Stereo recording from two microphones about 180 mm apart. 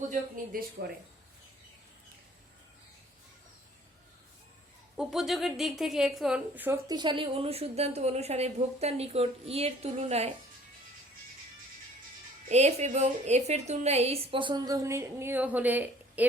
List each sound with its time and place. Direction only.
0.1 s speech: 50° right (ahead or behind)
4.9 s a woman's voice: centre (ahead or behind)
6.8 s a woman's voice: 25° right (ahead or behind)
12.5 s a woman's voice: 40° right (ahead or behind); by 16.2 s 10° right (ahead or behind)